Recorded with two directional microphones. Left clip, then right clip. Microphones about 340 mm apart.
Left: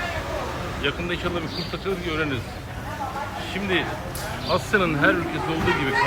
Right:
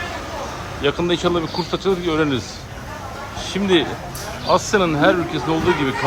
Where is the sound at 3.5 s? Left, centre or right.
Centre.